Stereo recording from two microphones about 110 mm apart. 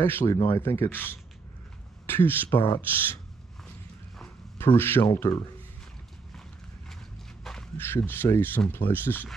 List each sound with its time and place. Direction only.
0.0 s speech: 20° left (ahead or behind)
4.7 s speech: 20° left (ahead or behind)
7.7 s speech: 20° left (ahead or behind)